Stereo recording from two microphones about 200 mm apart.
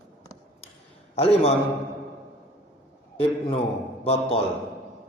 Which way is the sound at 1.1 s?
30° left (ahead or behind).